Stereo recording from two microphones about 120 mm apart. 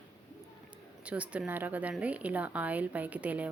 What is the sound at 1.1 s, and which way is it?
A woman's voice, 10° right (ahead or behind).